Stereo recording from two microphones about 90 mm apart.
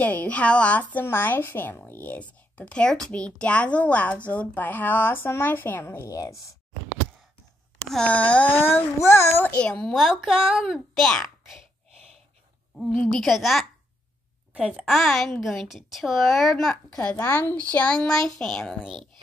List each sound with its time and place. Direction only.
0.0 s a woman's voice: 15° left (ahead or behind)
6.1 s speech: 40° left (ahead or behind)
7.9 s speech: 10° left (ahead or behind); by 9.4 s 30° left (ahead or behind)
9.4 s a woman's voice: 10° left (ahead or behind)
12.7 s a woman's voice: centre (ahead or behind)
14.5 s a woman's voice: 10° right (ahead or behind)
17.1 s a woman's voice: 20° left (ahead or behind); by 19.0 s centre (ahead or behind)